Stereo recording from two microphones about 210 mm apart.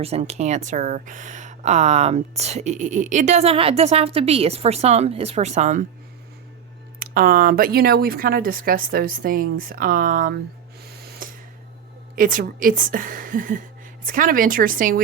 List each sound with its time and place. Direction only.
0.0 s a woman's voice: 30° right (ahead or behind)
7.0 s speech: 45° right (ahead or behind)
11.0 s a sound: 50° right (ahead or behind)
12.1 s a woman's voice: 40° right (ahead or behind)